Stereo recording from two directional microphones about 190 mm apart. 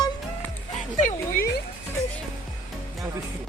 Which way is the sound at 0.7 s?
40° left (ahead or behind).